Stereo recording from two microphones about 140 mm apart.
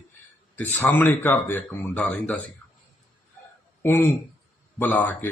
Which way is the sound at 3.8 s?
15° left (ahead or behind).